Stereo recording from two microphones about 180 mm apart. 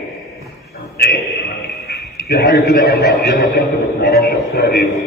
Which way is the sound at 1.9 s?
60° left (ahead or behind).